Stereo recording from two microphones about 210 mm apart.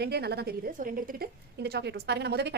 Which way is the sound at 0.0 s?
50° right (ahead or behind).